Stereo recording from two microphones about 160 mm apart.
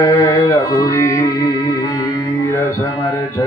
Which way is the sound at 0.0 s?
20° left (ahead or behind).